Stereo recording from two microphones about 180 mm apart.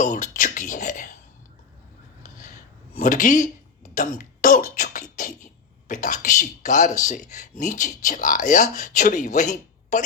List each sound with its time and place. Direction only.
0.0 s a sound: 45° left (ahead or behind)
3.0 s speech: 45° left (ahead or behind)
3.9 s beatboxing: 45° left (ahead or behind)
5.9 s speech: 45° left (ahead or behind)